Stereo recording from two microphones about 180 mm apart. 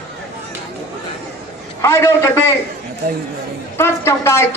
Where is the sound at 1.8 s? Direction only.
15° left (ahead or behind).